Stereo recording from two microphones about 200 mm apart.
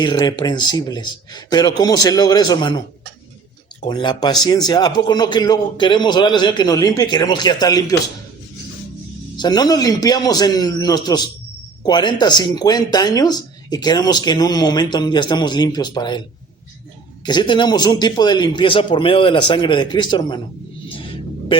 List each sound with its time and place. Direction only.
0.0 s speech: 20° left (ahead or behind)
3.8 s speech: 20° left (ahead or behind)
9.4 s speech: 20° left (ahead or behind)
17.2 s speech: 25° left (ahead or behind)
20.9 s music: 25° left (ahead or behind)